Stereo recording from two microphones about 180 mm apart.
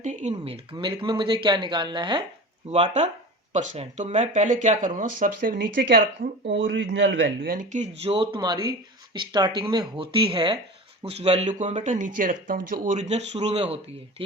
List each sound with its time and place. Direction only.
0.0 s speech: 40° right (ahead or behind); by 2.2 s 25° right (ahead or behind)
2.6 s speech: 35° right (ahead or behind); by 6.0 s 50° right (ahead or behind)
6.4 s speech: 80° right
7.5 s speech: 45° right (ahead or behind); by 14.3 s 30° right (ahead or behind)